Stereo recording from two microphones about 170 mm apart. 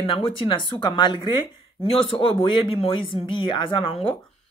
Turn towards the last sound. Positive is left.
turn(degrees=30)  # may be behind; listen again after turning